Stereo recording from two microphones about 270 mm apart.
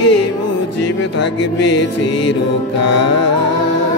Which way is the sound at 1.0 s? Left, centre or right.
Left.